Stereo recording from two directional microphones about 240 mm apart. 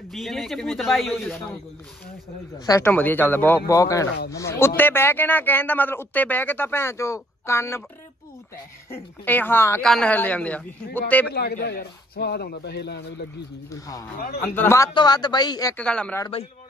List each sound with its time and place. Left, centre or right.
0.1 s a man's voice: centre
2.6 s speech: centre
9.2 s speech: centre
11.2 s a man's voice: left
13.7 s speech: centre